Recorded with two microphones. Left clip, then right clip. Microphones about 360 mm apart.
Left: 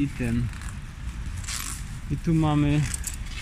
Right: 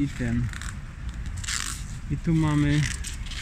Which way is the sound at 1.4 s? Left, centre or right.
Centre.